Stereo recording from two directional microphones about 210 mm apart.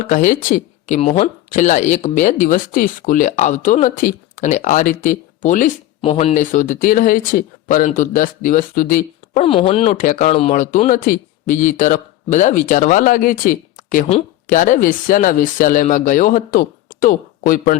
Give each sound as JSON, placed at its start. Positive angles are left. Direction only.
{"t": 0.0, "sound": "speech", "side_deg": 40}
{"t": 9.4, "sound": "speech", "side_deg": 25}